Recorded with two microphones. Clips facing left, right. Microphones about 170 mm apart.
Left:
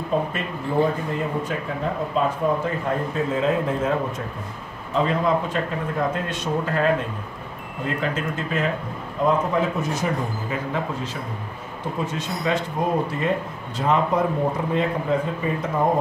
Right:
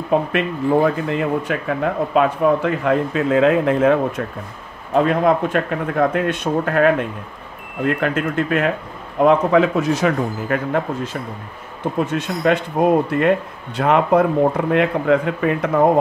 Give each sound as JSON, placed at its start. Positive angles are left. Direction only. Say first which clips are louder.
{"t": 0.1, "sound": "speech", "louder": "right 7 dB", "side_deg": -75}
{"t": 4.9, "sound": "speech", "louder": "right 5 dB", "side_deg": -60}
{"t": 9.2, "sound": "speech", "louder": "right 7 dB", "side_deg": -80}
{"t": 12.0, "sound": "speech", "louder": "right 7 dB", "side_deg": -60}